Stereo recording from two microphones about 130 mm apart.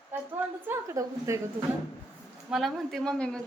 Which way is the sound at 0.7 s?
20° right (ahead or behind).